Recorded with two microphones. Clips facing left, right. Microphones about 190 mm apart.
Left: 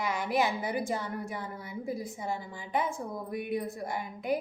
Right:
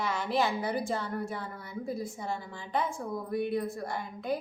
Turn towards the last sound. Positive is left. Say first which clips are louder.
# left 1 dB
turn(degrees=20)  # may be behind; listen again after turning